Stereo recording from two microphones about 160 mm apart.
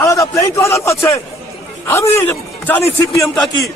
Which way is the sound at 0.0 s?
20° left (ahead or behind).